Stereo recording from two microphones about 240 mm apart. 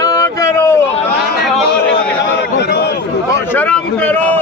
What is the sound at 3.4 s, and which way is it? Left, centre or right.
Speech, centre.